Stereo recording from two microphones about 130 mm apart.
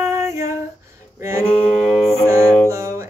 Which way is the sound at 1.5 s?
5° left (ahead or behind).